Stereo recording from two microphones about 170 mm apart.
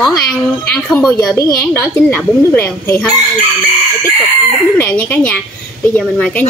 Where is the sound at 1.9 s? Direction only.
15° left (ahead or behind).